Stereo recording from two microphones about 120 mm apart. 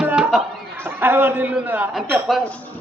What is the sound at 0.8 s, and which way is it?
A man's voice, 15° right (ahead or behind).